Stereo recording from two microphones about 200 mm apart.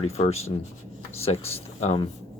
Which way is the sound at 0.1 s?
30° left (ahead or behind).